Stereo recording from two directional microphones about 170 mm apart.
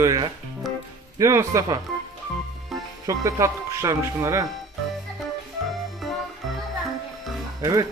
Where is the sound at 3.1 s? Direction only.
20° right (ahead or behind).